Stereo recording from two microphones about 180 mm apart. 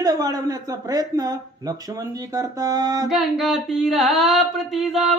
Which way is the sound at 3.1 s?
Centre (ahead or behind).